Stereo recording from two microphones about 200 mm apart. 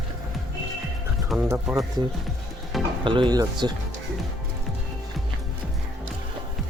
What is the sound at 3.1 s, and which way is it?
Speech, 20° right (ahead or behind).